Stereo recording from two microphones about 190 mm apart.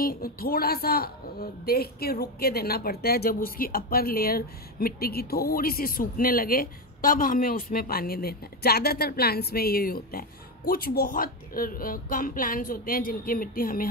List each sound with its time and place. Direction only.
0.0 s a woman's voice: 50° left (ahead or behind)